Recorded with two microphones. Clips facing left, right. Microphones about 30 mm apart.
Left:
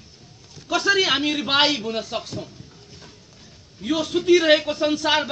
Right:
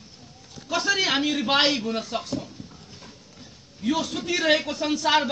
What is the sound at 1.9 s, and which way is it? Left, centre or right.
Speech, left.